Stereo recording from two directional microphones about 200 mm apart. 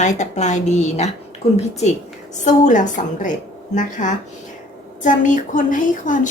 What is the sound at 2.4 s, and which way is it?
A woman's voice, 40° left (ahead or behind).